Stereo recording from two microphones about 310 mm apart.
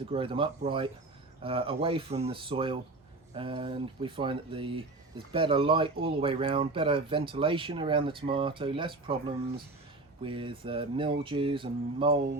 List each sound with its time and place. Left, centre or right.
0.1 s speech: centre